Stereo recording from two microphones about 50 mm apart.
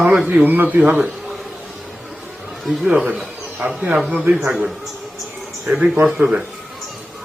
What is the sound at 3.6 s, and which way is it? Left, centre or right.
Speech, right.